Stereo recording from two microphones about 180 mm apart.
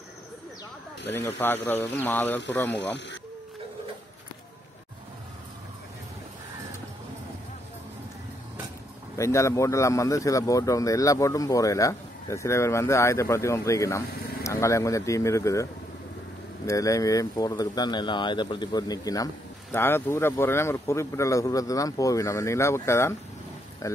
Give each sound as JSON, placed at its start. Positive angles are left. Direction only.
{"t": 1.0, "sound": "a man's voice", "side_deg": 10}
{"t": 9.1, "sound": "a man's voice", "side_deg": 15}